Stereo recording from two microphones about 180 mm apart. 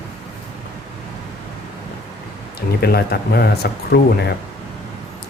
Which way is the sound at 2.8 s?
60° left (ahead or behind).